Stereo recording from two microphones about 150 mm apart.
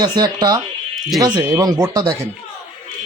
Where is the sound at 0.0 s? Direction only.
25° right (ahead or behind).